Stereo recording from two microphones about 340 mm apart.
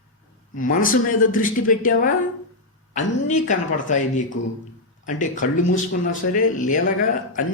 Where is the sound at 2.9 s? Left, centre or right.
Left.